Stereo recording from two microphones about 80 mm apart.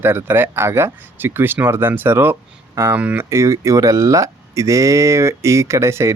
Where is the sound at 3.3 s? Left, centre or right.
Right.